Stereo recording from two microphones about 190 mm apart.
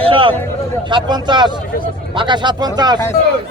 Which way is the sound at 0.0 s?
25° right (ahead or behind).